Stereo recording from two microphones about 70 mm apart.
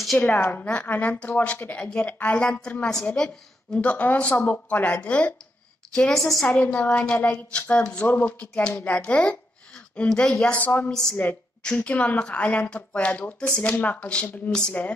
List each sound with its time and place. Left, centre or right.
0.2 s a woman's voice: left
5.9 s a woman's voice: centre
6.4 s a woman's voice: centre
10.6 s speech: left
10.9 s a woman's voice: centre
11.8 s a woman's voice: left